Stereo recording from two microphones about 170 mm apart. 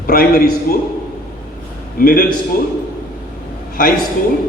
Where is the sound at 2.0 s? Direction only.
55° left (ahead or behind).